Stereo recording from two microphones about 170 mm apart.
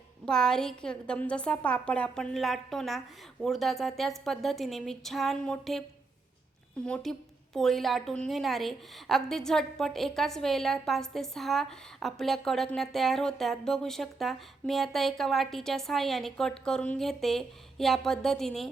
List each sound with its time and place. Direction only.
0.3 s a woman's voice: 5° left (ahead or behind)
6.8 s a woman's voice: 5° left (ahead or behind)